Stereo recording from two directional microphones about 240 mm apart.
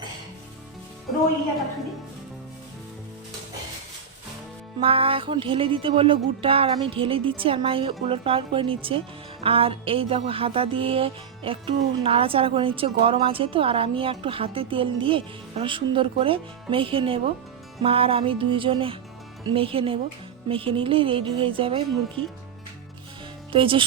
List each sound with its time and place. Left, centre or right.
4.8 s music: right
23.5 s music: right